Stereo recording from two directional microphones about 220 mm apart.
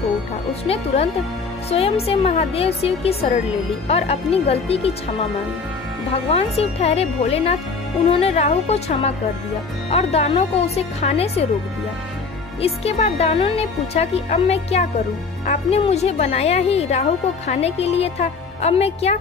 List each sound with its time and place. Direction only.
1.7 s speech: 25° left (ahead or behind)
6.2 s speech: 25° left (ahead or behind)
12.6 s speech: 30° left (ahead or behind)